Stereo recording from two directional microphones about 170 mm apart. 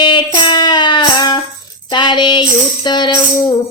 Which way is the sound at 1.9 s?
25° left (ahead or behind).